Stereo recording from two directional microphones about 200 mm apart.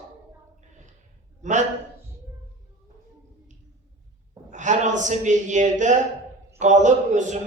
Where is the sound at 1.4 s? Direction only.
35° right (ahead or behind).